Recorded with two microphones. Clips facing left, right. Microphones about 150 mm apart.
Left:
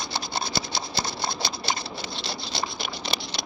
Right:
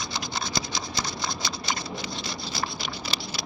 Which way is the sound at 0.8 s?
30° left (ahead or behind).